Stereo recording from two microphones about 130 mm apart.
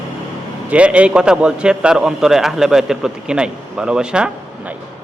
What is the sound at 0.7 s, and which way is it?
A man's voice, 10° right (ahead or behind).